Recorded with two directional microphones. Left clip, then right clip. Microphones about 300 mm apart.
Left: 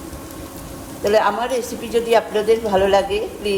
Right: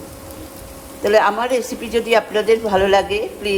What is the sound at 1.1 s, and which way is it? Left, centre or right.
Speech, centre.